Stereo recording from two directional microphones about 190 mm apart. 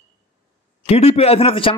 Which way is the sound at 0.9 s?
35° left (ahead or behind).